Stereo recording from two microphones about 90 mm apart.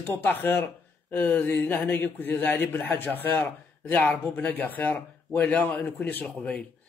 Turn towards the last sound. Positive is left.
turn(degrees=15)  # may be behind; listen again after turning